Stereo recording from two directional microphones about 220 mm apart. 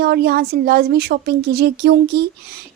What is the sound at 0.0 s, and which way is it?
Speech, 45° right (ahead or behind).